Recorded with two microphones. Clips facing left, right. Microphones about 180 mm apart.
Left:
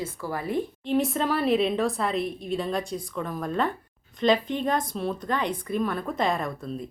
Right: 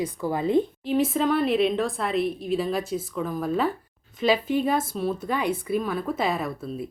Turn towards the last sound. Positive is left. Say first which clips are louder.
# right 1 dB
turn(degrees=-5)  # may be behind; listen again after turning